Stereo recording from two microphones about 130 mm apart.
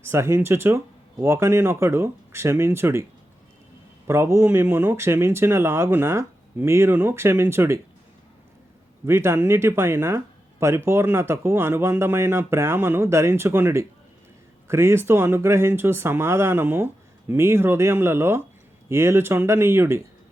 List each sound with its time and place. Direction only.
0.0 s speech: 20° right (ahead or behind)
9.0 s speech: 20° right (ahead or behind)